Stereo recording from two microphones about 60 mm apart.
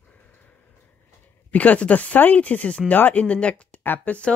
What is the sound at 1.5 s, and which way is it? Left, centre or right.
Speech, left.